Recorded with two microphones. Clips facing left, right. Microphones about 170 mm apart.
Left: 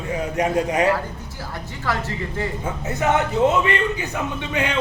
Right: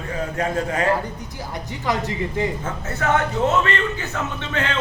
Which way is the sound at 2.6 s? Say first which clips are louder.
Left 2 dB; 15° left (ahead or behind).